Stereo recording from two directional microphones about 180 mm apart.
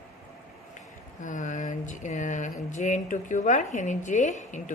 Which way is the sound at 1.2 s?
45° left (ahead or behind).